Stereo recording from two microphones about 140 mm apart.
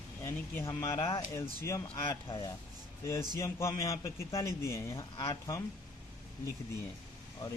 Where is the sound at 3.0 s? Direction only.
20° left (ahead or behind).